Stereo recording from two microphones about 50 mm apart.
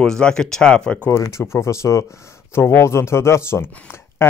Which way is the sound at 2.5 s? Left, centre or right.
Left.